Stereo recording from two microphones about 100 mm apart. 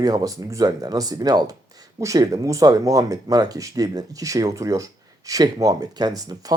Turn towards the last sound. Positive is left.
turn(degrees=-40)  # may be behind; listen again after turning